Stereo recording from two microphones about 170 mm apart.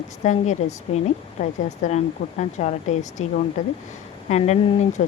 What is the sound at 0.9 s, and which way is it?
Speech, 40° left (ahead or behind).